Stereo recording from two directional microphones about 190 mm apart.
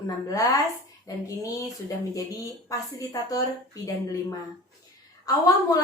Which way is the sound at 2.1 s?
20° left (ahead or behind).